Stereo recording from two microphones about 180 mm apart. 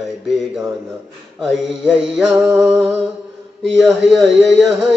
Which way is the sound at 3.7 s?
Centre (ahead or behind).